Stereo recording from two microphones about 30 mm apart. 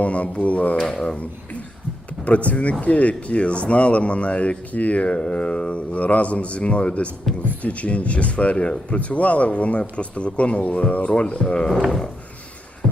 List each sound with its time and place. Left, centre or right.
0.0 s speech: left
2.2 s speech: left
5.0 s speech: left